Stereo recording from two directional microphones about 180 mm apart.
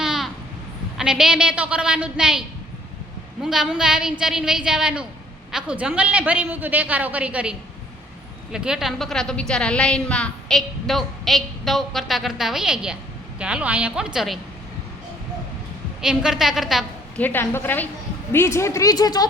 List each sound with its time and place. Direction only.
0.0 s vehicle: centre (ahead or behind)
0.9 s a woman's voice: 5° right (ahead or behind)
3.4 s a woman's voice: centre (ahead or behind)
8.5 s a woman's voice: 5° right (ahead or behind)
16.0 s a woman's voice: 5° right (ahead or behind)
17.2 s a woman's voice: 10° left (ahead or behind)